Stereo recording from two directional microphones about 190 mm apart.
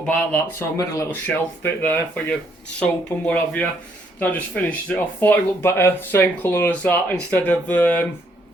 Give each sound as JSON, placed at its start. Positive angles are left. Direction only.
{"t": 0.0, "sound": "speech", "side_deg": 5}